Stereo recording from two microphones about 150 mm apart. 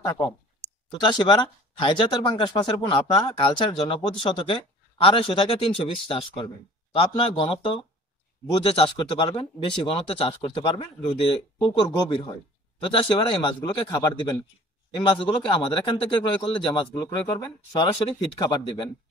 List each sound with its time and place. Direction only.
0.0 s a man's voice: 25° left (ahead or behind)